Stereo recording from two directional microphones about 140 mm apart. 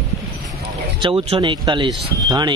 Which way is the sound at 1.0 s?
40° right (ahead or behind).